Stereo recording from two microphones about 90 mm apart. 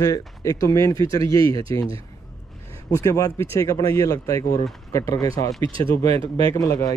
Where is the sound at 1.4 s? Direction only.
90° right.